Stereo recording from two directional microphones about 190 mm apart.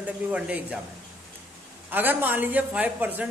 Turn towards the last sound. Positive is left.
turn(degrees=-5)  # may be behind; listen again after turning